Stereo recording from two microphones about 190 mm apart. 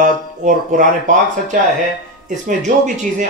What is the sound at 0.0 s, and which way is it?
Speech, 45° right (ahead or behind).